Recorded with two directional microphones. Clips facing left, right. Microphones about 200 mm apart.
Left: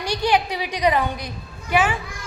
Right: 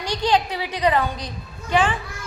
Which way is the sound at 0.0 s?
10° left (ahead or behind).